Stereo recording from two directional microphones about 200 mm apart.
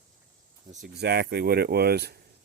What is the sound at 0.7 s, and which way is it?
Speech, 45° right (ahead or behind).